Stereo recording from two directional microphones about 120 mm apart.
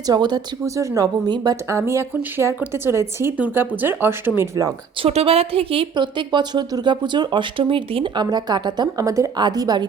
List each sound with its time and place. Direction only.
0.1 s speech: 35° right (ahead or behind)
5.0 s speech: 55° right (ahead or behind); by 9.8 s 35° right (ahead or behind)